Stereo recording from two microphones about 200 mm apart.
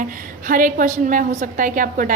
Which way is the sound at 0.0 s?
40° right (ahead or behind).